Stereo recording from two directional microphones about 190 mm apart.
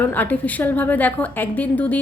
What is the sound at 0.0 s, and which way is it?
A woman's voice, 10° left (ahead or behind).